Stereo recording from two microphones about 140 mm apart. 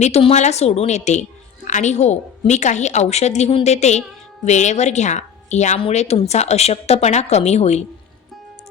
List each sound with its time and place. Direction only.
0.0 s a woman's voice: 50° left (ahead or behind)